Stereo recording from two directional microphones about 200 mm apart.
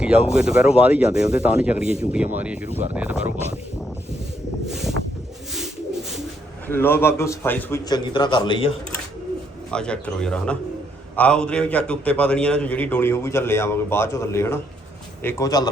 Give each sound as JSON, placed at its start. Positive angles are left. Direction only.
{"t": 0.0, "sound": "speech", "side_deg": -5}
{"t": 2.6, "sound": "speech", "side_deg": -35}
{"t": 2.9, "sound": "speech", "side_deg": -5}
{"t": 4.7, "sound": "a sound", "side_deg": 0}
{"t": 5.5, "sound": "bird", "side_deg": 0}
{"t": 6.7, "sound": "a man's voice", "side_deg": 10}
{"t": 9.7, "sound": "a man's voice", "side_deg": 5}